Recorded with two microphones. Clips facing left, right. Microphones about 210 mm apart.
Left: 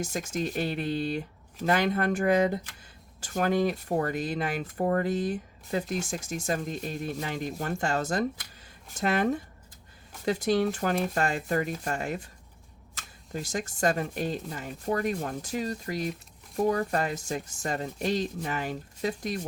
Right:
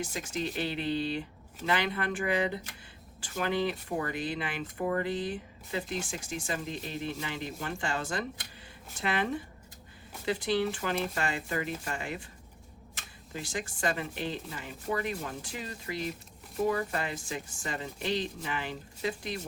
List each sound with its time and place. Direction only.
0.0 s speech: 45° left (ahead or behind)
13.3 s speech: 45° left (ahead or behind)